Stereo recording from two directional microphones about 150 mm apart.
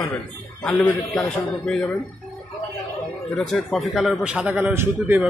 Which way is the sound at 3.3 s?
5° left (ahead or behind).